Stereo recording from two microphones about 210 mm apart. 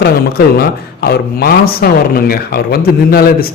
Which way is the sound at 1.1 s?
45° left (ahead or behind).